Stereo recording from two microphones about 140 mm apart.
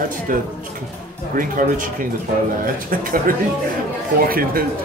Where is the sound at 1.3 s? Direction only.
75° right (ahead or behind).